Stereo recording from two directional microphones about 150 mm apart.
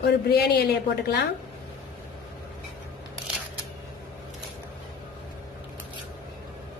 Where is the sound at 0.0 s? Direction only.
90° left.